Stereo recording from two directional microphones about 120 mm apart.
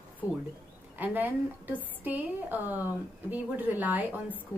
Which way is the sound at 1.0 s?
15° right (ahead or behind).